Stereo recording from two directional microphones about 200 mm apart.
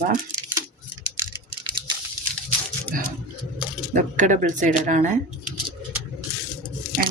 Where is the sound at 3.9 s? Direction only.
40° right (ahead or behind).